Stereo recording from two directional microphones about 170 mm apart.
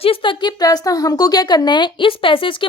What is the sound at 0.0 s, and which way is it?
Speech, 30° left (ahead or behind).